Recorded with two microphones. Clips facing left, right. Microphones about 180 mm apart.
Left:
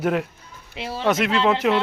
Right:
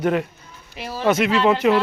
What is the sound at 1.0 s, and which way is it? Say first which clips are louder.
Speech: right 2 dB; centre (ahead or behind).